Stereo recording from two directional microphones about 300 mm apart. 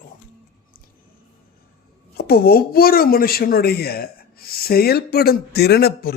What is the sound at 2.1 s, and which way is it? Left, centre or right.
Speech, left.